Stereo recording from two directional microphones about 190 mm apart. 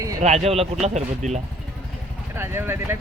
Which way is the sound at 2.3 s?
10° right (ahead or behind).